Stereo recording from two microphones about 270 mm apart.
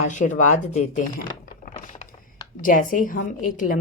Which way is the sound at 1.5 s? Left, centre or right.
Left.